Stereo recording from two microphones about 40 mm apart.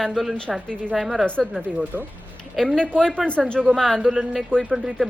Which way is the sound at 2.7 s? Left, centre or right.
Left.